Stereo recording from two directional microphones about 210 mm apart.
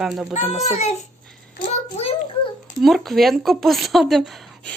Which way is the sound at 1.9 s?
30° left (ahead or behind).